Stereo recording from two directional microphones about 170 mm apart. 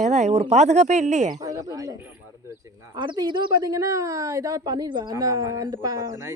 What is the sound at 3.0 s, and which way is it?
Speech, 25° right (ahead or behind).